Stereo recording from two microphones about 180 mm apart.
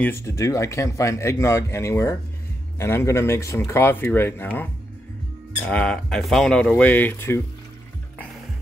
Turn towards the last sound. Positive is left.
turn(degrees=15)  # may be behind; listen again after turning